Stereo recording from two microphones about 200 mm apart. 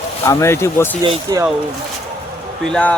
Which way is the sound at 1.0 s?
20° right (ahead or behind).